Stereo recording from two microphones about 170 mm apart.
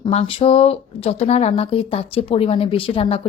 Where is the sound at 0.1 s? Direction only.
35° left (ahead or behind).